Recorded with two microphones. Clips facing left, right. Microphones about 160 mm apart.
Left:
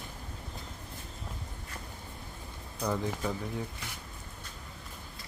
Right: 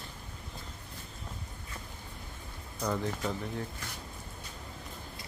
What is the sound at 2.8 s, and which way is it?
Speech, 10° left (ahead or behind).